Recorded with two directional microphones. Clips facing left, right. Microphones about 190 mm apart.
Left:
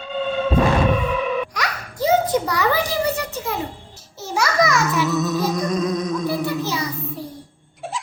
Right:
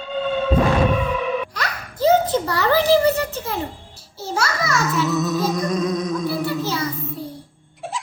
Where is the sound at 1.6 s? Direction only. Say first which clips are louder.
Right 1 dB; 15° left (ahead or behind).